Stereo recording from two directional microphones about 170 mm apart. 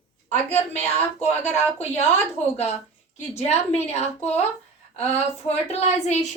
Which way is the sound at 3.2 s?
40° left (ahead or behind).